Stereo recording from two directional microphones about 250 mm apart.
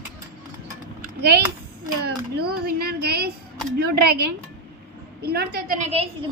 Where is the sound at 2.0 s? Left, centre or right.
Right.